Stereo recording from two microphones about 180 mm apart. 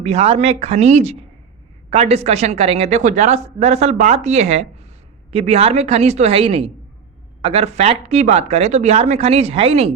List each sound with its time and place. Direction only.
0.0 s speech: 35° right (ahead or behind)